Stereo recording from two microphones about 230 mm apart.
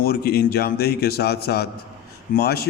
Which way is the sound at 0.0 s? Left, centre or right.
Left.